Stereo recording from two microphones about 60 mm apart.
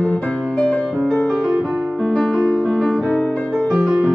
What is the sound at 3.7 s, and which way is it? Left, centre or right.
Music, centre.